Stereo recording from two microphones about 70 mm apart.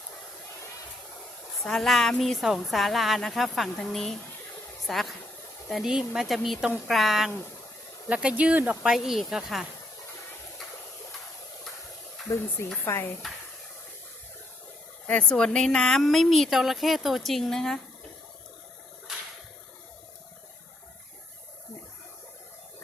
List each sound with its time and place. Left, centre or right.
1.6 s a woman's voice: centre
8.0 s speech: centre
12.3 s speech: left
12.8 s speech: left
15.0 s a woman's voice: left; by 17.7 s centre